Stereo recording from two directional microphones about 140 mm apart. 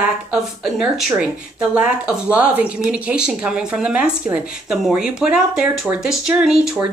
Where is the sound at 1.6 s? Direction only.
10° right (ahead or behind).